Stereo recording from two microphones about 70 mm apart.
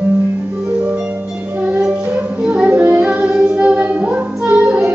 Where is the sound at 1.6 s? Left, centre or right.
Centre.